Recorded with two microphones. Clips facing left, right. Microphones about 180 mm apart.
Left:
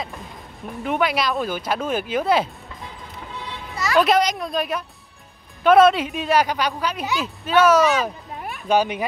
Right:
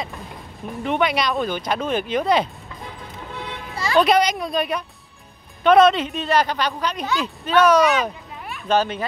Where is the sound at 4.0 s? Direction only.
Centre (ahead or behind).